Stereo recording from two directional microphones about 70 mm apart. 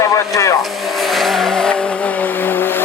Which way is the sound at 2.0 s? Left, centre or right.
Left.